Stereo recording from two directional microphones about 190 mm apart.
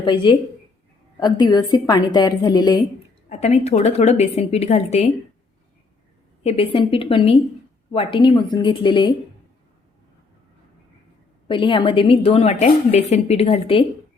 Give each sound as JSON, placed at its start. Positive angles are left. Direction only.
{"t": 0.0, "sound": "a woman's voice", "side_deg": 25}
{"t": 3.2, "sound": "a woman's voice", "side_deg": 35}
{"t": 6.4, "sound": "a woman's voice", "side_deg": 30}
{"t": 11.4, "sound": "a woman's voice", "side_deg": 25}